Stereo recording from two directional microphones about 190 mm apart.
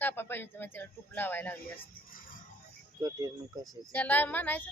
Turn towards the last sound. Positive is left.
turn(degrees=10)  # may be behind; listen again after turning